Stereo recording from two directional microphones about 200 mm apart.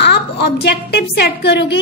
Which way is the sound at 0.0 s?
55° left (ahead or behind).